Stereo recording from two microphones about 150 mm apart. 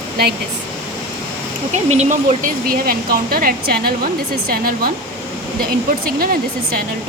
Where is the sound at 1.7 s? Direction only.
50° right (ahead or behind); by 6.8 s 80° right.